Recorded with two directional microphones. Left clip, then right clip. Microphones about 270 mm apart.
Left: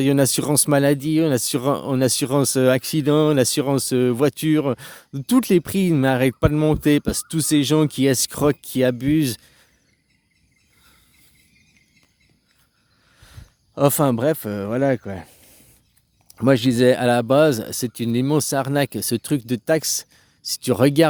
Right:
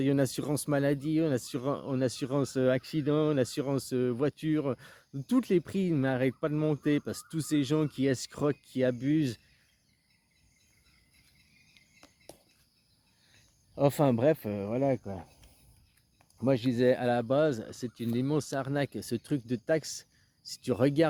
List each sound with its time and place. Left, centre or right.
0.0 s speech: left
13.7 s speech: left
16.4 s speech: left